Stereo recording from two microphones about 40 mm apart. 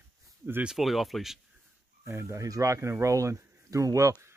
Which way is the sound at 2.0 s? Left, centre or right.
Right.